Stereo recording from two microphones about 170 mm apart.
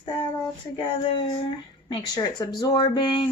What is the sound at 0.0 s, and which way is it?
Child singing, 30° left (ahead or behind).